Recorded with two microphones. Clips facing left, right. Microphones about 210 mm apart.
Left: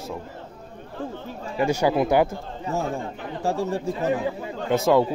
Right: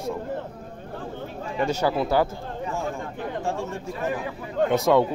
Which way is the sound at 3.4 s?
35° left (ahead or behind).